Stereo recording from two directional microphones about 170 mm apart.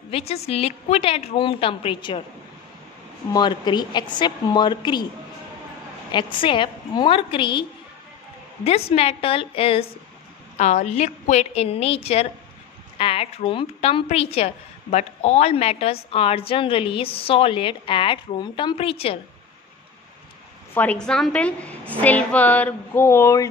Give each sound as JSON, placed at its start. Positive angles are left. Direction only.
{"t": 0.1, "sound": "a woman's voice", "side_deg": 35}
{"t": 3.3, "sound": "a woman's voice", "side_deg": 25}
{"t": 6.1, "sound": "a woman's voice", "side_deg": 30}
{"t": 8.6, "sound": "a woman's voice", "side_deg": 35}
{"t": 20.7, "sound": "a sound", "side_deg": 10}